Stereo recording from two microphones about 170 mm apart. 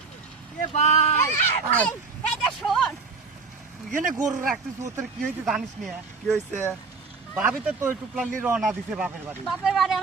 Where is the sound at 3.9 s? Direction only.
50° right (ahead or behind).